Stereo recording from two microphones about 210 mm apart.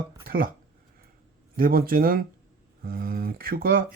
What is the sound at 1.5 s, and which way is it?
Speech, 45° right (ahead or behind).